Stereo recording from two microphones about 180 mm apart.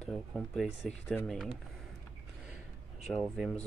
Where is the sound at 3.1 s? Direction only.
Centre (ahead or behind).